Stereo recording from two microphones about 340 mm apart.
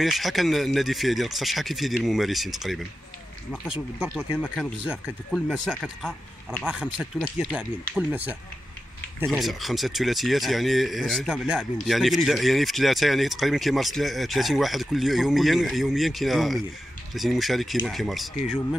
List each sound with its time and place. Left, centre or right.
0.0 s speech: centre